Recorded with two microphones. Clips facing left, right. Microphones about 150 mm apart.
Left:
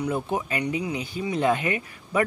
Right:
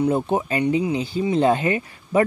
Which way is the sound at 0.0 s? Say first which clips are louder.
Right 6 dB; 30° right (ahead or behind).